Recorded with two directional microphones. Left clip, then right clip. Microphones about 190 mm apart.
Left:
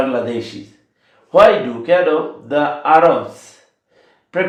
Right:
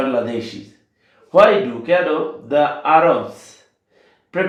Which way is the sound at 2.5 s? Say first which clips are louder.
Right 2 dB; 25° left (ahead or behind).